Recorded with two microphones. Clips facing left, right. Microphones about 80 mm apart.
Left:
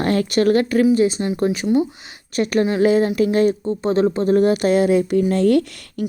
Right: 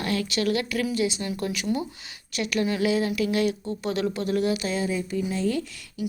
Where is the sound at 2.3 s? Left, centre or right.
Left.